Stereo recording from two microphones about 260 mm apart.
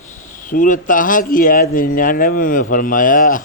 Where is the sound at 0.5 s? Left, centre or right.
Left.